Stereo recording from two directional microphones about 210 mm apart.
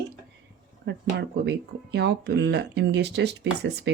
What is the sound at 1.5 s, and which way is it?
Speech, 55° right (ahead or behind).